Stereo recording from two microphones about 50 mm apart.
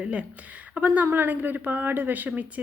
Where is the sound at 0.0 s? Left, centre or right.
Right.